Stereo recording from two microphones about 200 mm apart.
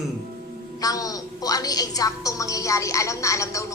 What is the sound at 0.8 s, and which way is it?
A woman's voice, 20° left (ahead or behind).